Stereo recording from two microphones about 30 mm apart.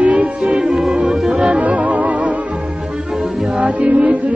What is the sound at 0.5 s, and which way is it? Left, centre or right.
Music, right.